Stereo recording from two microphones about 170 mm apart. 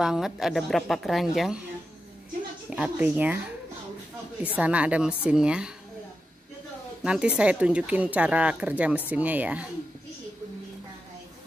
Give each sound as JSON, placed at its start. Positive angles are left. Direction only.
{"t": 0.0, "sound": "a woman's voice", "side_deg": -5}
{"t": 2.7, "sound": "speech", "side_deg": -10}
{"t": 4.4, "sound": "speech", "side_deg": -10}
{"t": 7.0, "sound": "speech", "side_deg": -5}